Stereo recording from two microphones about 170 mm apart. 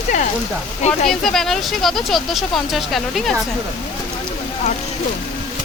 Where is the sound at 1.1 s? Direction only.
Centre (ahead or behind).